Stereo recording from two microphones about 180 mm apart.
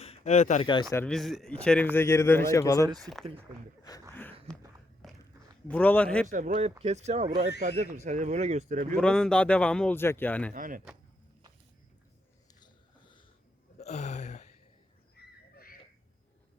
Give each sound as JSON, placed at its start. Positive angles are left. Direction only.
{"t": 0.0, "sound": "a sound", "side_deg": 35}
{"t": 0.6, "sound": "speech", "side_deg": 25}
{"t": 0.9, "sound": "speech", "side_deg": 5}
{"t": 3.0, "sound": "speech", "side_deg": 0}
{"t": 4.1, "sound": "a sound", "side_deg": 10}
{"t": 5.6, "sound": "speech", "side_deg": 10}
{"t": 6.3, "sound": "speech", "side_deg": -45}
{"t": 9.0, "sound": "speech", "side_deg": 5}
{"t": 10.5, "sound": "speech", "side_deg": -50}
{"t": 12.5, "sound": "a sound", "side_deg": 25}
{"t": 13.7, "sound": "a sound", "side_deg": 35}
{"t": 15.1, "sound": "crow", "side_deg": 60}